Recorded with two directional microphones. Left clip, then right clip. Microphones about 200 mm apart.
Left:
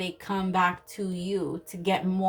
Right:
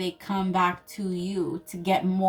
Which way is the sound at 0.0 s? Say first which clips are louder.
Right 1 dB; 40° left (ahead or behind).